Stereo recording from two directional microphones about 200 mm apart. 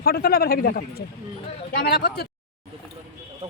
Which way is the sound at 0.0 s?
50° left (ahead or behind).